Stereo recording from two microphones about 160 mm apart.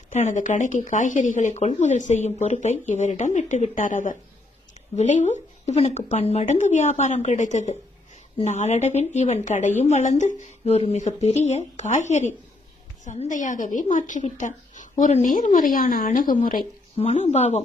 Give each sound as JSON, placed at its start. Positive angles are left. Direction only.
{"t": 0.1, "sound": "speech", "side_deg": 50}
{"t": 17.0, "sound": "speech", "side_deg": 40}